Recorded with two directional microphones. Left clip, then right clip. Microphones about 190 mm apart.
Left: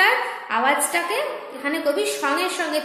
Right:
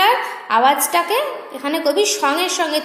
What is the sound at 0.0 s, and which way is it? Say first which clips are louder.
A woman's voice: right 3 dB; 30° right (ahead or behind).